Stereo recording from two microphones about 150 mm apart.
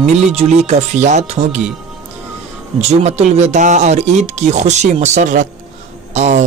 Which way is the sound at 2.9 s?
45° right (ahead or behind).